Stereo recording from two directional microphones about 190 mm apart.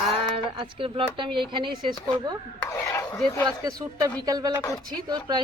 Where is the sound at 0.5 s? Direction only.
25° right (ahead or behind).